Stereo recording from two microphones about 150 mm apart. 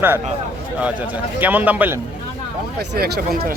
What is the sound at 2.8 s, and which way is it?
Speech, 90° right.